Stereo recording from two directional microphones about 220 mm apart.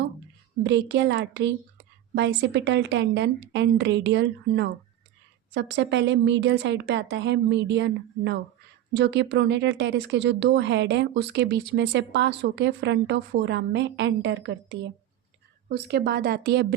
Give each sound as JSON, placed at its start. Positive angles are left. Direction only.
{"t": 0.6, "sound": "speech", "side_deg": -50}